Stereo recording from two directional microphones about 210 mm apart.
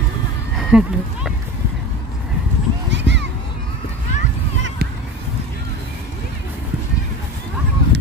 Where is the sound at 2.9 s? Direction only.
60° right (ahead or behind).